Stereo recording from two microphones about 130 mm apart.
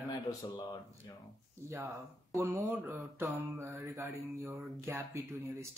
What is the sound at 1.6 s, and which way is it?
Speech, 25° right (ahead or behind).